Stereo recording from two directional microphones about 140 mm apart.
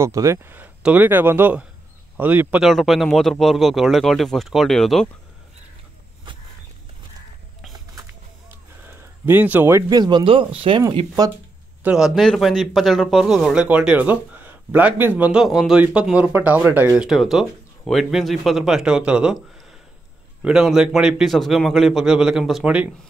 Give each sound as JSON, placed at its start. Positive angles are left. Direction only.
{"t": 0.0, "sound": "a man's voice", "side_deg": -20}
{"t": 8.8, "sound": "a man's voice", "side_deg": -15}
{"t": 11.8, "sound": "a man's voice", "side_deg": -5}
{"t": 15.4, "sound": "a man's voice", "side_deg": 0}
{"t": 16.9, "sound": "a man's voice", "side_deg": -5}
{"t": 20.4, "sound": "a man's voice", "side_deg": -5}